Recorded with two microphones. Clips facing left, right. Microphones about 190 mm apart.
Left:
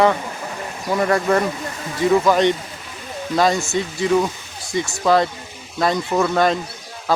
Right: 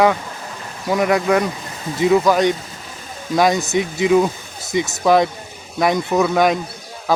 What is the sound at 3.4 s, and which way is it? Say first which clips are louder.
Speech: right 2 dB; 20° right (ahead or behind).